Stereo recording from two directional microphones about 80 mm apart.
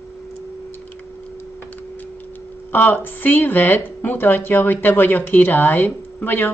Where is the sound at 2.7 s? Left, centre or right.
Left.